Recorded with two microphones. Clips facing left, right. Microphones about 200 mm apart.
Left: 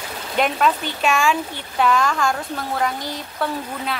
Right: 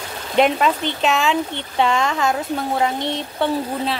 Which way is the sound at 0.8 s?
20° right (ahead or behind).